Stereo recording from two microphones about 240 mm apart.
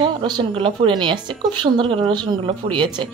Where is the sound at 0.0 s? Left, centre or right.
Centre.